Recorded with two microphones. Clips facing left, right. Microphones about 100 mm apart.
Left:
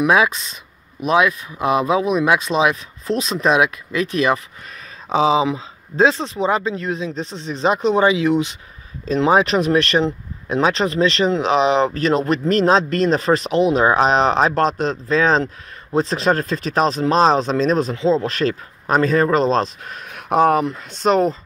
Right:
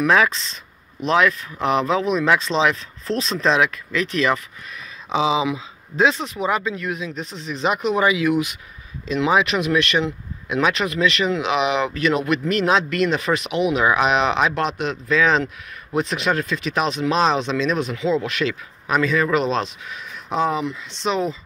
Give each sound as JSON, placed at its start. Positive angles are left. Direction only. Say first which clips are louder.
{"t": 0.0, "sound": "speech", "louder": "left 2 dB", "side_deg": 15}
{"t": 5.1, "sound": "speech", "louder": "left 4 dB", "side_deg": 35}